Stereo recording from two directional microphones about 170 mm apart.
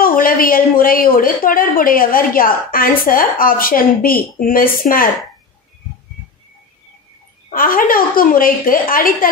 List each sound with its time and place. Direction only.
0.0 s a woman's voice: 55° left (ahead or behind)
7.5 s a woman's voice: 55° left (ahead or behind)